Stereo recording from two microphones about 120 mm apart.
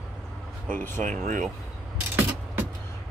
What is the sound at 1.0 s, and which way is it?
Speech, 90° right.